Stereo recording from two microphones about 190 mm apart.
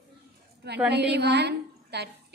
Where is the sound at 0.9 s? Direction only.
60° right (ahead or behind).